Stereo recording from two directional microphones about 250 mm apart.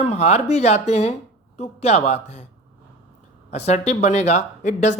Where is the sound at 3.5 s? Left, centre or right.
Left.